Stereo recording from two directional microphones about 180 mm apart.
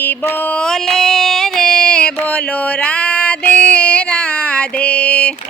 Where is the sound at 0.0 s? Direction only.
10° left (ahead or behind).